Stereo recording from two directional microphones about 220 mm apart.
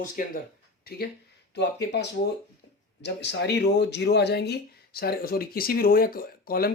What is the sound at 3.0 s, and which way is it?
Speech, 50° left (ahead or behind).